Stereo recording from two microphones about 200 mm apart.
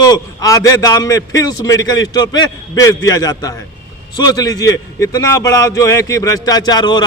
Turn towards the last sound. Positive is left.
turn(degrees=20)  # may be behind; listen again after turning